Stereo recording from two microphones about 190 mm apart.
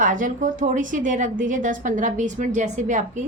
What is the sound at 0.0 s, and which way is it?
A woman's voice, 45° right (ahead or behind).